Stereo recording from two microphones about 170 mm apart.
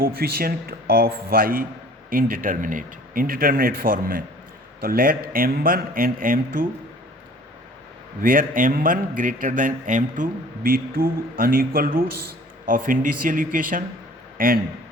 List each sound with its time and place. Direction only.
0.0 s a man's voice: 60° right (ahead or behind)
8.2 s a man's voice: 55° right (ahead or behind)